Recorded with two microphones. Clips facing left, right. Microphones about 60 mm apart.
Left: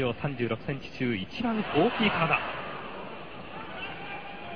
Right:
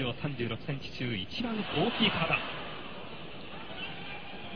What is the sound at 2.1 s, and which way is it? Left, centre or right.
Speech, left.